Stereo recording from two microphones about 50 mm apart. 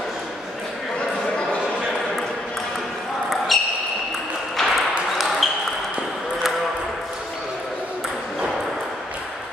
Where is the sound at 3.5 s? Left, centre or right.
Centre.